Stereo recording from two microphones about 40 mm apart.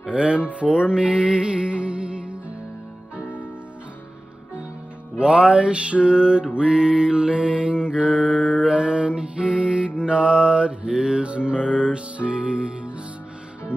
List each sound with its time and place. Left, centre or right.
0.0 s mantra: right
0.4 s mantra: right
5.1 s music: right
5.5 s mantra: right
8.4 s music: left
8.6 s mantra: right
10.9 s music: centre
11.1 s music: right
11.6 s mantra: right
12.2 s music: right